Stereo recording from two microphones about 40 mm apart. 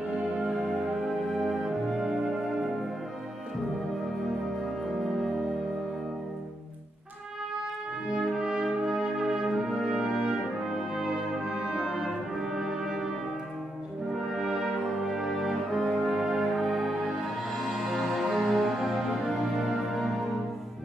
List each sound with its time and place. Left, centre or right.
0.1 s music: centre
1.0 s music: centre
4.6 s music: centre
8.1 s brass instrument: centre
14.1 s brass instrument: centre
18.0 s music: centre